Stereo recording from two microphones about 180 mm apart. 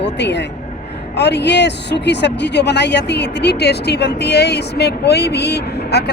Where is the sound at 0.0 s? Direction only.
75° left (ahead or behind).